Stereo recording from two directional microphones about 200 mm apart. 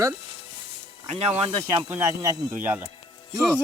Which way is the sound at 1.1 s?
30° right (ahead or behind).